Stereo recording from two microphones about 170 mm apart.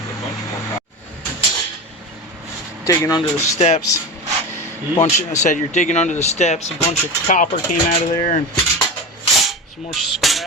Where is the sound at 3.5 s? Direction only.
40° left (ahead or behind).